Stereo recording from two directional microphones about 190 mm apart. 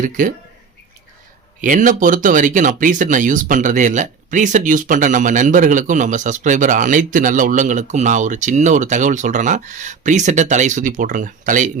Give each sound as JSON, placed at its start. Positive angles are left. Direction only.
{"t": 0.0, "sound": "speech", "side_deg": -45}
{"t": 1.6, "sound": "speech", "side_deg": -45}